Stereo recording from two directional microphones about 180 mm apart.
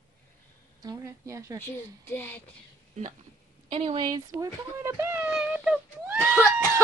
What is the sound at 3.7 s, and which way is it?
Speech, 35° right (ahead or behind).